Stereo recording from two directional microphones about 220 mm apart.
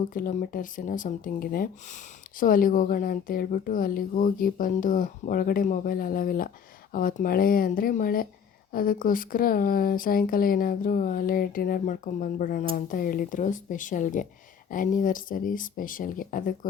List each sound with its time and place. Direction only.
0.0 s a woman's voice: 35° left (ahead or behind)